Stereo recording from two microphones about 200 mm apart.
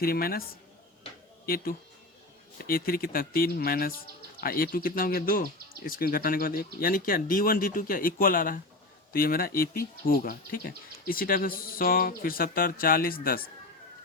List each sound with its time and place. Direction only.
0.0 s speech: 50° left (ahead or behind)
1.5 s speech: 45° left (ahead or behind)